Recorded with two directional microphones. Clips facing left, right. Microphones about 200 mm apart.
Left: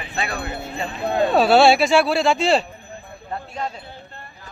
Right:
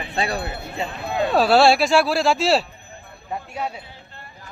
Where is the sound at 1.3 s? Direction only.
Centre (ahead or behind).